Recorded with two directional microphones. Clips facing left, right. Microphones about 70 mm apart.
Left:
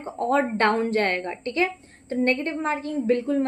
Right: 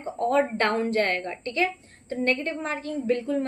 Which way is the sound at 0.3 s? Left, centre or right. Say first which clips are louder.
Left 2 dB; left.